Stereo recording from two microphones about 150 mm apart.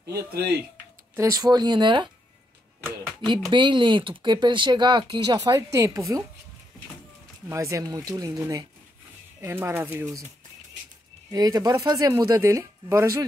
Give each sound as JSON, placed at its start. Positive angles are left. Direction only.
{"t": 0.1, "sound": "speech", "side_deg": -90}
{"t": 1.1, "sound": "speech", "side_deg": -20}
{"t": 3.4, "sound": "speech", "side_deg": -30}
{"t": 7.4, "sound": "speech", "side_deg": -20}
{"t": 11.3, "sound": "speech", "side_deg": -25}